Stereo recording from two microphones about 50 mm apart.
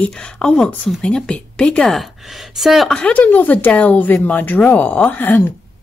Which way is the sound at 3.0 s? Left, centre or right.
Left.